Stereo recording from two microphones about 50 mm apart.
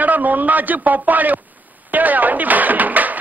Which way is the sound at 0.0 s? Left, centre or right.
Right.